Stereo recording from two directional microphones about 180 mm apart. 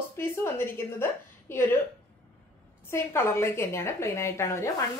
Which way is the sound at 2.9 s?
15° left (ahead or behind).